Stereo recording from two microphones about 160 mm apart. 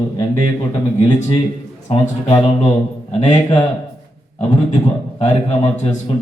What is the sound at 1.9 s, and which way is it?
A man's voice, 40° left (ahead or behind).